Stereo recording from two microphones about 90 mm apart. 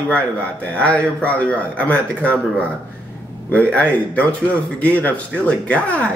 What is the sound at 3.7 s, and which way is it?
Speech, 10° left (ahead or behind).